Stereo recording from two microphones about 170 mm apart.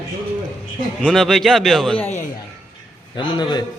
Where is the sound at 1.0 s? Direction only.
5° left (ahead or behind).